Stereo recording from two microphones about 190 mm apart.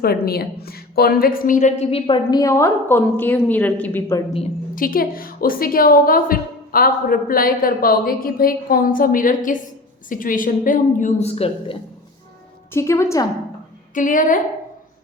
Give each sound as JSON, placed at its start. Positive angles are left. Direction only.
{"t": 0.0, "sound": "a woman's voice", "side_deg": 55}
{"t": 4.7, "sound": "a woman's voice", "side_deg": 45}
{"t": 12.7, "sound": "a woman's voice", "side_deg": 15}
{"t": 13.9, "sound": "a woman's voice", "side_deg": 45}